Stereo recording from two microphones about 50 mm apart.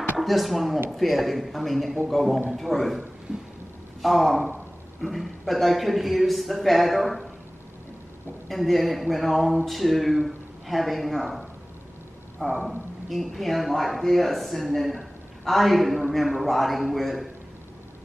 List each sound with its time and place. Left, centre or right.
0.2 s speech: centre
3.3 s a sound: centre
4.0 s speech: centre
8.5 s speech: centre